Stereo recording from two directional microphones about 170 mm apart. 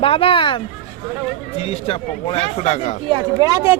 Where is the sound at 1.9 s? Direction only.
40° left (ahead or behind).